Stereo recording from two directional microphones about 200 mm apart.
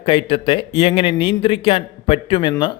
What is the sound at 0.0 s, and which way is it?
Speech, 25° left (ahead or behind).